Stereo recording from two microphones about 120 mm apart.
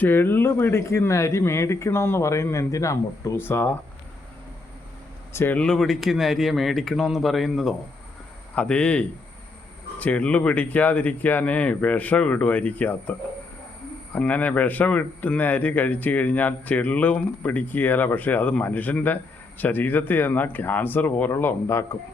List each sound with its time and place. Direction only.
0.0 s speech: 15° left (ahead or behind)
5.3 s speech: 20° left (ahead or behind)
5.5 s a man's voice: 5° left (ahead or behind); by 21.8 s 20° left (ahead or behind)